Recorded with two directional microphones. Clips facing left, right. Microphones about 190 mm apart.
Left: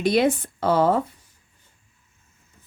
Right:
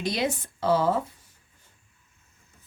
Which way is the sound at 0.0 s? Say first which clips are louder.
Left 8 dB; 60° left (ahead or behind).